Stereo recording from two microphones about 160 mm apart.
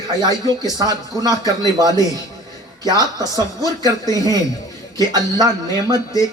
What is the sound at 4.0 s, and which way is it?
Speech, 20° left (ahead or behind).